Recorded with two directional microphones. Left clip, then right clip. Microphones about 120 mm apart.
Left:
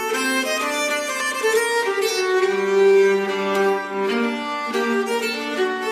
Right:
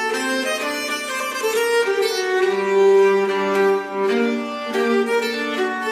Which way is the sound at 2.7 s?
25° left (ahead or behind).